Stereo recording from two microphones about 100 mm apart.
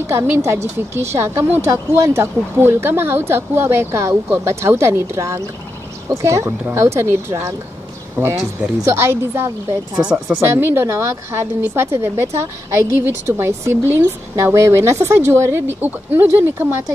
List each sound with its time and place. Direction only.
0.0 s a woman's voice: 25° right (ahead or behind)
10.0 s speech: 10° right (ahead or behind)
10.4 s a woman's voice: 25° right (ahead or behind)